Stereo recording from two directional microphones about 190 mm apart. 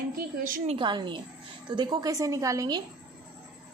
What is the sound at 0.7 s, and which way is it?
A woman's voice, 25° right (ahead or behind).